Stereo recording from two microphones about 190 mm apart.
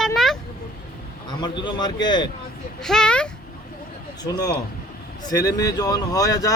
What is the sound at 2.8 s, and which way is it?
Speech, 5° left (ahead or behind).